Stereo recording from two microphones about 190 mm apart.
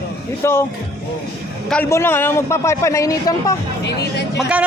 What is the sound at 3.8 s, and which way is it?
Music, 60° left (ahead or behind).